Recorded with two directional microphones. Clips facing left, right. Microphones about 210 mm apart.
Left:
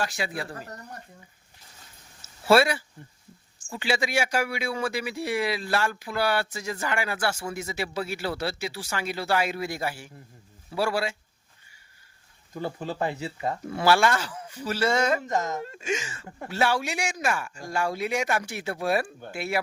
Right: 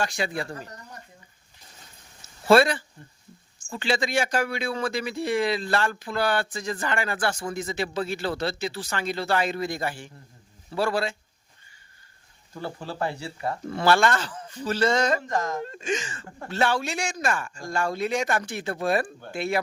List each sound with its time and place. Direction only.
0.0 s speech: 5° left (ahead or behind)
2.5 s speech: 10° left (ahead or behind)
12.5 s speech: 15° left (ahead or behind)
15.3 s speech: 20° left (ahead or behind)
15.6 s speech: 10° left (ahead or behind)